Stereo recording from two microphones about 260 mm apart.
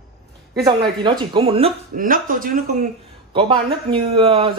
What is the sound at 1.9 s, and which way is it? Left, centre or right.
Speech, right.